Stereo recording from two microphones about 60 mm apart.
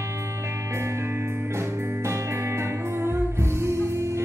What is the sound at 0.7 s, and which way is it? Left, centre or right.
Music, right.